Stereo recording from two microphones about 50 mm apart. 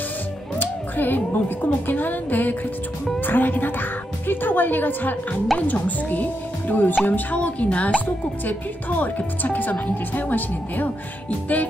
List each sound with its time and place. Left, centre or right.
0.6 s speech: left